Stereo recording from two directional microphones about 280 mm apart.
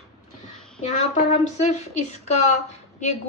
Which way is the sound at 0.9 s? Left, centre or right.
Left.